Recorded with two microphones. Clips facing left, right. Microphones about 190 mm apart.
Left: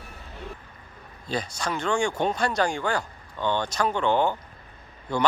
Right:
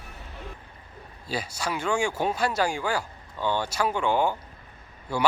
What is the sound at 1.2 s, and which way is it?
Speech, 5° right (ahead or behind).